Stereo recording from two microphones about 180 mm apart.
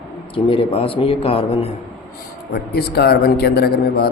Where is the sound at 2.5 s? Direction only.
60° left (ahead or behind).